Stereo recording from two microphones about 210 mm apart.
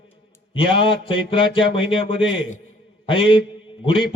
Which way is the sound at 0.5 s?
25° left (ahead or behind).